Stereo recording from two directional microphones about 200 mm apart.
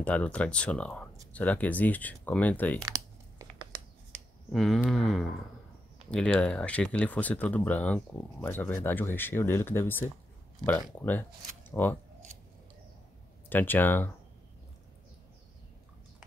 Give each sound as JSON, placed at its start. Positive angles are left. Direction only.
{"t": 0.0, "sound": "speech", "side_deg": 5}
{"t": 2.8, "sound": "tearing", "side_deg": -20}
{"t": 4.5, "sound": "speech", "side_deg": 0}
{"t": 13.5, "sound": "speech", "side_deg": 10}